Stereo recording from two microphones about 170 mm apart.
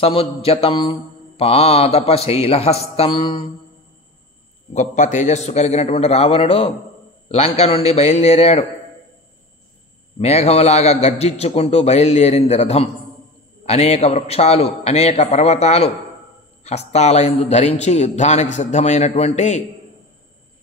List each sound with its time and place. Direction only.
0.0 s mantra: 35° left (ahead or behind)
4.7 s mantra: 45° left (ahead or behind)
10.1 s mantra: 40° left (ahead or behind)